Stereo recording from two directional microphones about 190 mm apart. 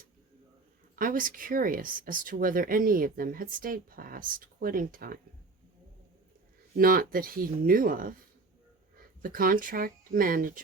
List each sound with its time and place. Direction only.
0.9 s speech: 45° right (ahead or behind)
6.7 s speech: 50° right (ahead or behind)
9.2 s speech: 50° right (ahead or behind)